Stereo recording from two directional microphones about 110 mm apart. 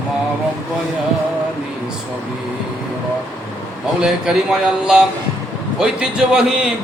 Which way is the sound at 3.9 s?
5° right (ahead or behind).